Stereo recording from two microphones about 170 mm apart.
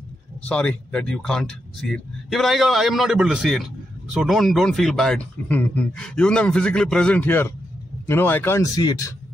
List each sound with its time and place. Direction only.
0.5 s a man's voice: 5° left (ahead or behind)